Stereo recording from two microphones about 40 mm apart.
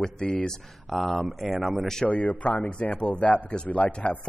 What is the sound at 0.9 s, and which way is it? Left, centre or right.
Speech, centre.